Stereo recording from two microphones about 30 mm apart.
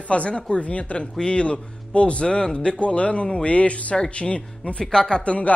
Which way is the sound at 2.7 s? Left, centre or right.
Left.